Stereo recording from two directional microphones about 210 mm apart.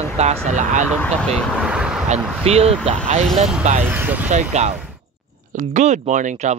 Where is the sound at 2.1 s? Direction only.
30° right (ahead or behind).